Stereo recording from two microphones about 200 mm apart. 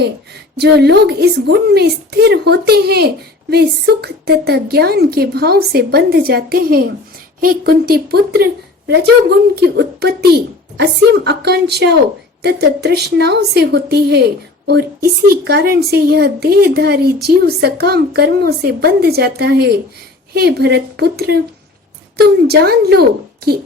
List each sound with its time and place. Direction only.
0.5 s a woman's voice: 55° right (ahead or behind)
9.6 s a woman's voice: 55° right (ahead or behind)
15.4 s speech: 50° right (ahead or behind)
22.4 s speech: 50° right (ahead or behind)